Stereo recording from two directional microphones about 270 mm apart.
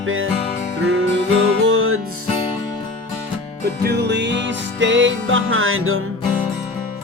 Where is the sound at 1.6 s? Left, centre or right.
Right.